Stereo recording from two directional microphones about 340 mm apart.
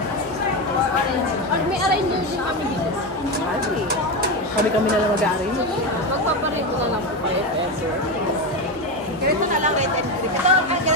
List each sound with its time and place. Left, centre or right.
10.4 s speech: centre